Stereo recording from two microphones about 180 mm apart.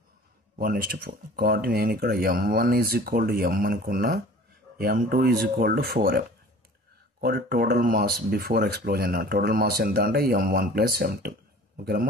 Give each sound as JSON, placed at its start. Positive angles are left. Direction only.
{"t": 0.6, "sound": "speech", "side_deg": -55}